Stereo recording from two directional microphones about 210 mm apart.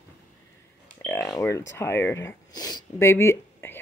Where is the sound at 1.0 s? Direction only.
10° left (ahead or behind).